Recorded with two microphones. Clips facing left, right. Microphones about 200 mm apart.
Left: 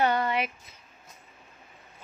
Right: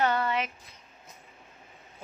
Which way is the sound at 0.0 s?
15° left (ahead or behind).